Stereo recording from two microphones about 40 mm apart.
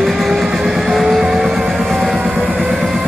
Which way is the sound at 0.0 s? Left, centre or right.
Centre.